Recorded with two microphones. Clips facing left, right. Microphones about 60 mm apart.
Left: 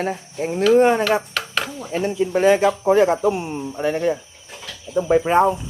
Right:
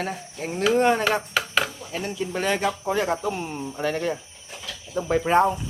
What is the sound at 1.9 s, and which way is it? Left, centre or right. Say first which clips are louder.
A man's voice: left 8 dB; left.